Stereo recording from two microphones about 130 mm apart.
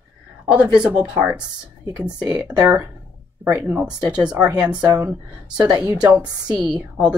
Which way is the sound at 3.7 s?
5° right (ahead or behind).